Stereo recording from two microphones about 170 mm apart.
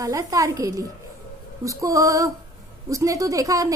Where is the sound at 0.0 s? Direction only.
20° right (ahead or behind).